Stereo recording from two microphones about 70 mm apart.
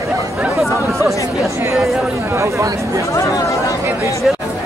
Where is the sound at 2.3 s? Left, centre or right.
Right.